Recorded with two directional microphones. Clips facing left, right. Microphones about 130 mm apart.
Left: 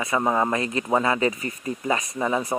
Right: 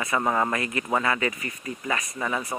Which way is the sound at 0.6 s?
25° left (ahead or behind).